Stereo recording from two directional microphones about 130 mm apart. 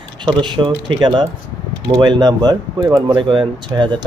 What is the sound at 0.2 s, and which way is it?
Speech, 35° right (ahead or behind).